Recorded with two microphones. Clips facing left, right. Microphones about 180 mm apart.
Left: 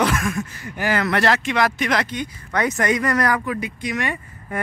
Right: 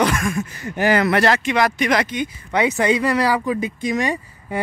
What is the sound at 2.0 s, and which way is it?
Speech, 20° right (ahead or behind).